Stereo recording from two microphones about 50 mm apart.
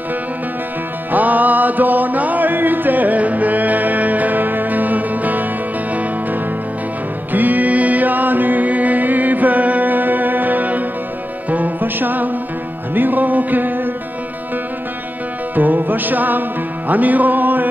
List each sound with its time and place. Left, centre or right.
1.1 s chant: right
7.3 s music: right
15.5 s music: right